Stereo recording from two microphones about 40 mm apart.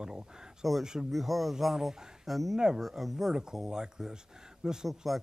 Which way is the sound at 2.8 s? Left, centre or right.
Centre.